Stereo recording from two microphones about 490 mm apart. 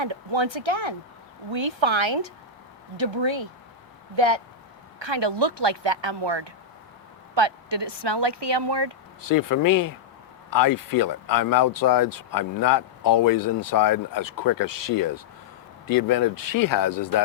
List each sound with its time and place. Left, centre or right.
0.0 s speech: right
9.3 s speech: left